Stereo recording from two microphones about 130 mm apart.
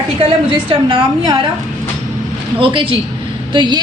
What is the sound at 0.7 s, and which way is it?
Speech, 40° right (ahead or behind).